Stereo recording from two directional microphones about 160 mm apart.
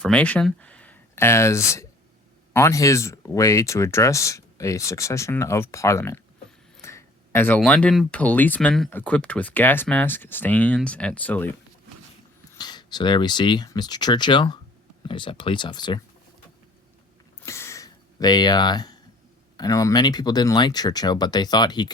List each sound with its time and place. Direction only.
0.0 s speech: 10° left (ahead or behind)
12.5 s speech: 25° left (ahead or behind)
17.4 s a sound: 15° left (ahead or behind)
19.5 s speech: 20° left (ahead or behind)